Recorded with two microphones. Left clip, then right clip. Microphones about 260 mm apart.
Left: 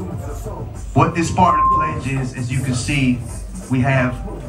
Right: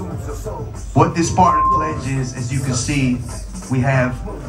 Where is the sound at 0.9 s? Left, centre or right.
Right.